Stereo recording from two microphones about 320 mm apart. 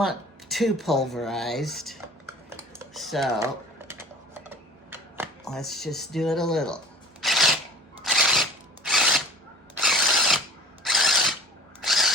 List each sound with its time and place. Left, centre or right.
0.0 s speech: centre
2.6 s computer keyboard: centre
7.2 s a sound: centre
8.0 s drill: centre
9.8 s ratchet: centre
10.8 s a sound: centre
11.8 s drill: centre